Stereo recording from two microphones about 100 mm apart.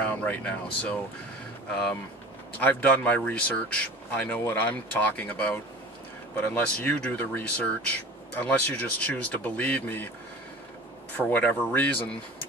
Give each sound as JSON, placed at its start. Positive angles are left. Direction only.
{"t": 0.0, "sound": "speech", "side_deg": 15}
{"t": 2.6, "sound": "speech", "side_deg": 15}
{"t": 11.1, "sound": "speech", "side_deg": 15}